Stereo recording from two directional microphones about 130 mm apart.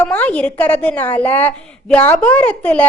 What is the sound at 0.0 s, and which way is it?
A woman's voice, 10° left (ahead or behind).